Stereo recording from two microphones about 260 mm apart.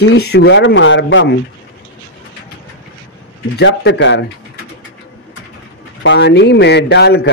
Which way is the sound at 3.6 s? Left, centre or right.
Left.